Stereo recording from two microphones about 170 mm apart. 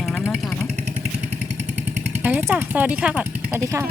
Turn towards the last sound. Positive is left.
turn(degrees=-15)  # may be behind; listen again after turning